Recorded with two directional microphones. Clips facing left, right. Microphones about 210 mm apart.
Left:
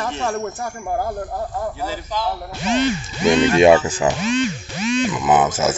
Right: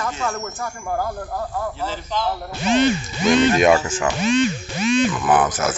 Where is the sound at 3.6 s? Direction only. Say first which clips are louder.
Left 4 dB; 30° left (ahead or behind).